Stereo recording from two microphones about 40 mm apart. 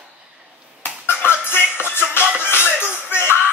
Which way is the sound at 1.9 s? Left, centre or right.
Left.